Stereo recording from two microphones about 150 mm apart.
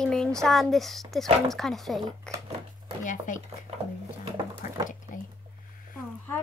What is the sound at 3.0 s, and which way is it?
Speech, 55° left (ahead or behind).